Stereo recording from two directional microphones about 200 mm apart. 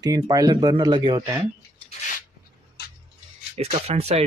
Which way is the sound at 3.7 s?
30° right (ahead or behind).